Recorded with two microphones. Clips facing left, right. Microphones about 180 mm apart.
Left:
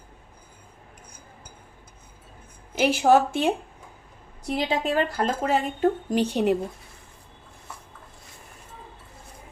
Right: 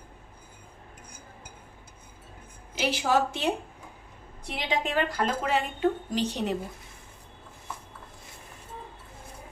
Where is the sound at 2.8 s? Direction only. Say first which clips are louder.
Left 7 dB; 50° left (ahead or behind).